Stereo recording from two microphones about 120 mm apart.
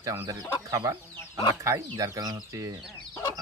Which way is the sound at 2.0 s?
30° right (ahead or behind).